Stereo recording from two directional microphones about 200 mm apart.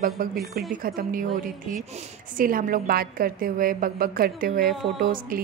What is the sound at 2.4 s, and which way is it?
A woman's voice, 45° right (ahead or behind).